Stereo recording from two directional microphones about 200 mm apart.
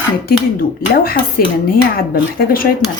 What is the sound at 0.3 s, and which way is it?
Speech, 50° left (ahead or behind).